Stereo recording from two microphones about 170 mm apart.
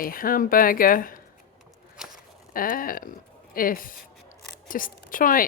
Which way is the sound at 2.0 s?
5° right (ahead or behind).